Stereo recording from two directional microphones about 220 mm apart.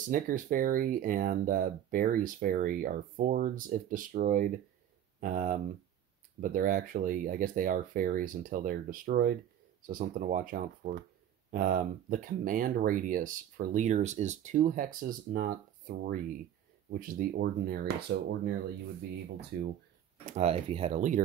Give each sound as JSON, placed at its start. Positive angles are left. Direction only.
{"t": 0.1, "sound": "speech", "side_deg": -40}
{"t": 19.5, "sound": "speech", "side_deg": -45}
{"t": 20.3, "sound": "speech", "side_deg": -30}